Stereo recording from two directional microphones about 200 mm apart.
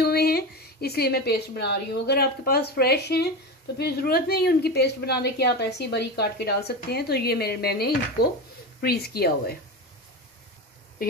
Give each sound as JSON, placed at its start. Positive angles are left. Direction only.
{"t": 0.0, "sound": "speech", "side_deg": 50}